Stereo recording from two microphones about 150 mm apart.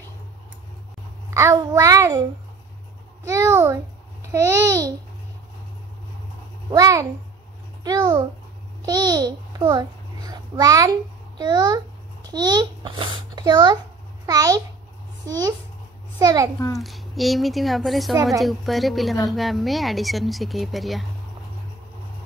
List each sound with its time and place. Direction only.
1.3 s a child's voice: 20° right (ahead or behind)
3.3 s a child's voice: 20° right (ahead or behind)
6.7 s a child's voice: 20° right (ahead or behind)
16.7 s speech: centre (ahead or behind)